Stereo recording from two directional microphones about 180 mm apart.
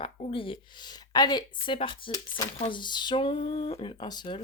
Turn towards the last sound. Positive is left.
turn(degrees=25)  # may be behind; listen again after turning